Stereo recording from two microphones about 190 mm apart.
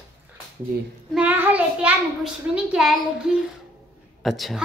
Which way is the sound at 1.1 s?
10° right (ahead or behind).